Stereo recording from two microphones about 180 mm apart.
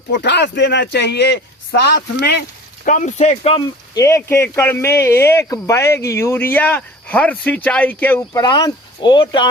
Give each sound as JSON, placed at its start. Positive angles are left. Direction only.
{"t": 0.1, "sound": "a man's voice", "side_deg": 75}
{"t": 2.8, "sound": "speech", "side_deg": 45}
{"t": 3.9, "sound": "speech", "side_deg": 15}
{"t": 8.4, "sound": "speech", "side_deg": 25}